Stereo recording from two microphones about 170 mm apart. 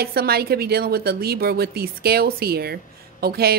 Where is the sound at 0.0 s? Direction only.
65° right (ahead or behind).